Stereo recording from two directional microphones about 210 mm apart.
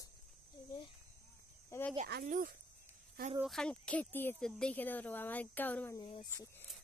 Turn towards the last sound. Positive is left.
turn(degrees=10)  # may be behind; listen again after turning